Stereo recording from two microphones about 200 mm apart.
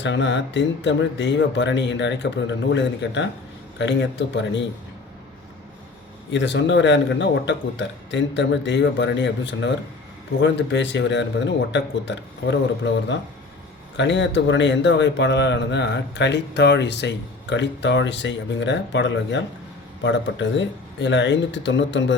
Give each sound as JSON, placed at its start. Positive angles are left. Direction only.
{"t": 0.0, "sound": "a man's voice", "side_deg": 60}
{"t": 6.3, "sound": "a man's voice", "side_deg": 65}